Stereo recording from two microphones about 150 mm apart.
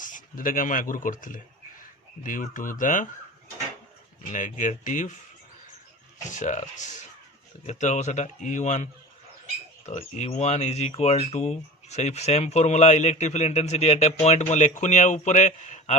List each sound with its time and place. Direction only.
0.0 s speech: 65° left (ahead or behind)
4.2 s speech: 60° left (ahead or behind)
6.3 s speech: 55° left (ahead or behind)